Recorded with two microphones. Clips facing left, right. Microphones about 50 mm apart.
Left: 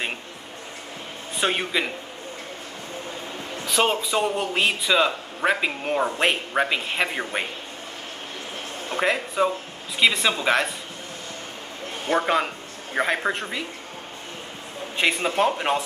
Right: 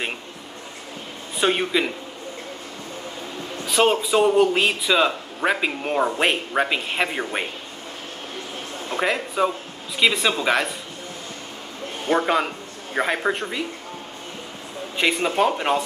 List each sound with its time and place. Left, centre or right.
1.4 s a man's voice: centre
3.6 s a man's voice: centre
9.0 s a man's voice: centre
12.1 s a man's voice: centre
15.0 s a man's voice: centre